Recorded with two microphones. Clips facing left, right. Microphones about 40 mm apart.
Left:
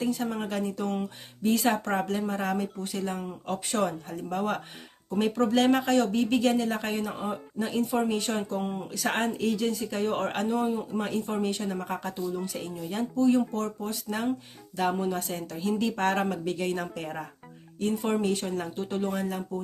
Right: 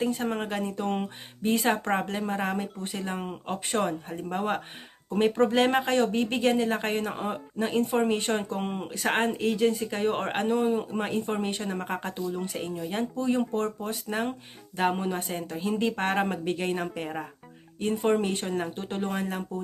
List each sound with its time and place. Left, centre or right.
0.0 s speech: right
7.7 s speech: right
10.4 s speech: right